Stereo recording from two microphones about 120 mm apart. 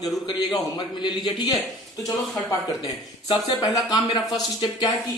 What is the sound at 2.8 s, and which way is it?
Speech, 35° left (ahead or behind).